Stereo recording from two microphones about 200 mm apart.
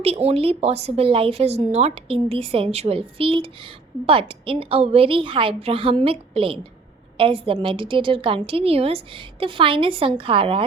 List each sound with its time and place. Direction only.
0.0 s speech: 30° right (ahead or behind)